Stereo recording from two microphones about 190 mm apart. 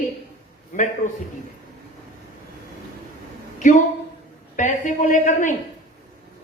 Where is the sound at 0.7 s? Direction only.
45° left (ahead or behind).